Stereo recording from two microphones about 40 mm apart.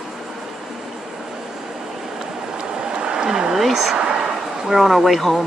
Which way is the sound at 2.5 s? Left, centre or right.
Right.